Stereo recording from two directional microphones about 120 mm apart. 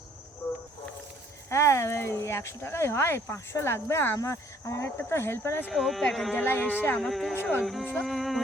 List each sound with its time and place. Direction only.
1.5 s speech: 25° left (ahead or behind)
5.7 s speech: centre (ahead or behind)
6.4 s speech: 15° left (ahead or behind)
7.0 s speech: centre (ahead or behind)